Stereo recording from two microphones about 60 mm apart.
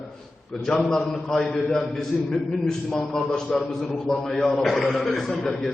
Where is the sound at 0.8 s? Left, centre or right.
Centre.